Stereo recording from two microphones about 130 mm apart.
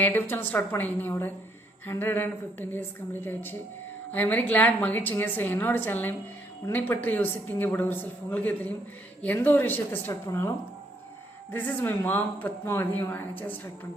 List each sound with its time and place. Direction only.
0.0 s a woman's voice: 15° left (ahead or behind)
11.5 s a woman's voice: 15° left (ahead or behind)